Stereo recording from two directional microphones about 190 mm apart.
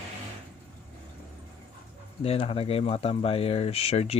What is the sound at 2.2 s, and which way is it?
Speech, 30° left (ahead or behind).